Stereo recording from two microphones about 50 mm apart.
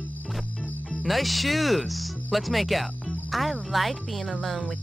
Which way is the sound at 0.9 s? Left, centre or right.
Centre.